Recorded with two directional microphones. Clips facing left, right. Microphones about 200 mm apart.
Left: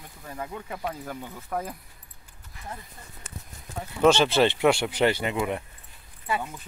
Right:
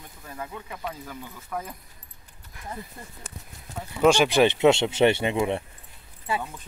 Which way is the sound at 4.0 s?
10° right (ahead or behind).